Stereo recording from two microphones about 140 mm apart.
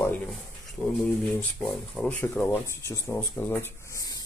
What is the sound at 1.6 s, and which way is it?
Speech, 5° left (ahead or behind).